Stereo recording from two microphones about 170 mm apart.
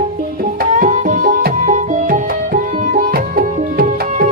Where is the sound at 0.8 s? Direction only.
50° right (ahead or behind).